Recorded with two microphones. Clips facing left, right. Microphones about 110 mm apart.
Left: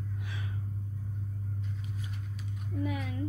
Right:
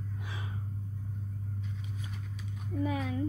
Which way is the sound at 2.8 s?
30° right (ahead or behind).